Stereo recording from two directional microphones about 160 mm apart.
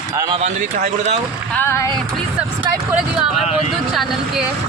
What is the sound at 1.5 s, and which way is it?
Speech, 15° left (ahead or behind).